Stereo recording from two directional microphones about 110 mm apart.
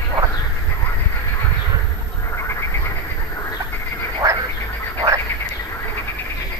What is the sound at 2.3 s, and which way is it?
Frog, 25° left (ahead or behind).